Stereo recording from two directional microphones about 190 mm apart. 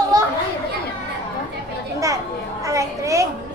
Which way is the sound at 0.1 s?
20° right (ahead or behind).